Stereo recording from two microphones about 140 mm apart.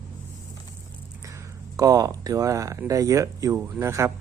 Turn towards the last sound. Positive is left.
turn(degrees=-20)  # may be behind; listen again after turning